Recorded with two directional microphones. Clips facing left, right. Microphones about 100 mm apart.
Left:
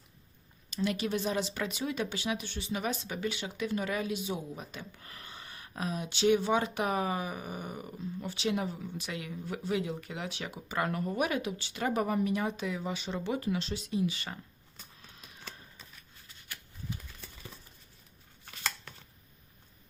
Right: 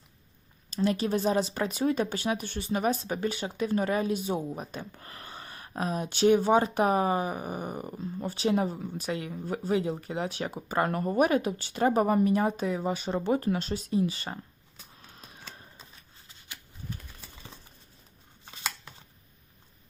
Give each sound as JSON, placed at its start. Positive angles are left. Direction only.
{"t": 0.7, "sound": "speech", "side_deg": -40}
{"t": 15.1, "sound": "a sound", "side_deg": -35}
{"t": 18.4, "sound": "scissors", "side_deg": -20}